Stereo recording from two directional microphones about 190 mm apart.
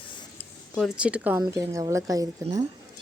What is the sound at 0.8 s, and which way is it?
A woman's voice, 5° right (ahead or behind).